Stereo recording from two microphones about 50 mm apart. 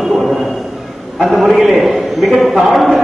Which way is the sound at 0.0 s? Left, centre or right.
Centre.